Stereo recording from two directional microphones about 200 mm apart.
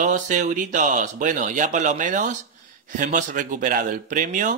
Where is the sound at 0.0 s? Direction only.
40° right (ahead or behind).